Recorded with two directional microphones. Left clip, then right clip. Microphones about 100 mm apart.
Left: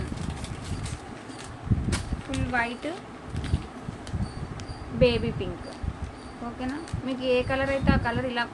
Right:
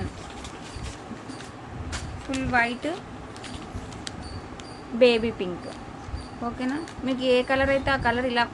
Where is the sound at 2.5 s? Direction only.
40° right (ahead or behind).